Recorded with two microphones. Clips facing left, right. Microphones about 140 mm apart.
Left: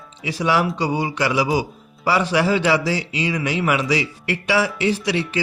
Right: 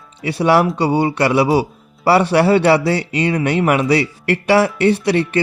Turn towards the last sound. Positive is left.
turn(degrees=-60)  # may be behind; listen again after turning